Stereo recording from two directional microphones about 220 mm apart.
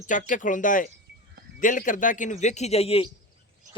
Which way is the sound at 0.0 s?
35° left (ahead or behind).